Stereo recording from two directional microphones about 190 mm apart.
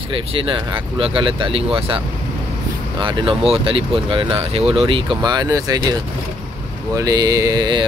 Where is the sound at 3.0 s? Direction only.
25° right (ahead or behind).